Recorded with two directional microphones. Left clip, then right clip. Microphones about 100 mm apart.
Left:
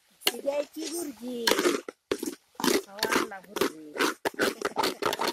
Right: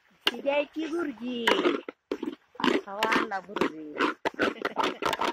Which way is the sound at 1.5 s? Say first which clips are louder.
Right 1 dB; 45° left (ahead or behind).